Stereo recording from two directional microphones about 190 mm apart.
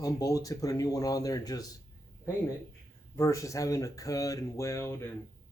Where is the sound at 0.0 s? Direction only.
20° left (ahead or behind).